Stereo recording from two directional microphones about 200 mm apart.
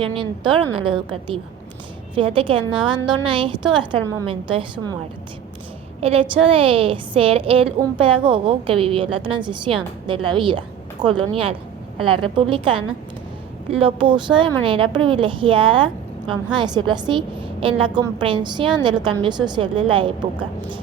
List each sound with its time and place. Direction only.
0.0 s a woman's voice: 25° right (ahead or behind)
2.1 s a woman's voice: 25° right (ahead or behind)
6.0 s a woman's voice: 30° right (ahead or behind)